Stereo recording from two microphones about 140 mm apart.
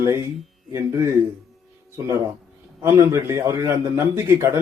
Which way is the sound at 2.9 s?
20° right (ahead or behind).